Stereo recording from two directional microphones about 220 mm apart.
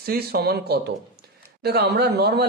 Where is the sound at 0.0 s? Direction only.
45° right (ahead or behind).